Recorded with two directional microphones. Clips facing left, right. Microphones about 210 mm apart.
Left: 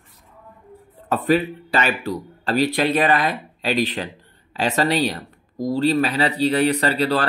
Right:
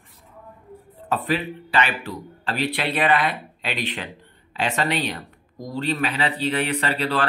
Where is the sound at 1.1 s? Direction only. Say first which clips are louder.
Left 5 dB; 45° left (ahead or behind).